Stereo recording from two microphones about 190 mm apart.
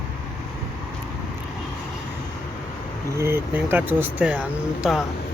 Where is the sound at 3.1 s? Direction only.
15° right (ahead or behind).